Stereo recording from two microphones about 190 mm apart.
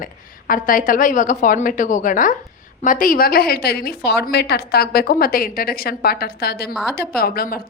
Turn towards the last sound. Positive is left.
turn(degrees=50)  # may be behind; listen again after turning